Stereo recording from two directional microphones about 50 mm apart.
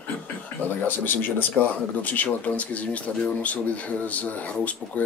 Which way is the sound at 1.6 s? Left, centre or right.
Left.